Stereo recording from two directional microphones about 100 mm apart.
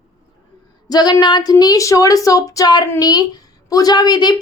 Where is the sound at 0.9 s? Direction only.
45° left (ahead or behind).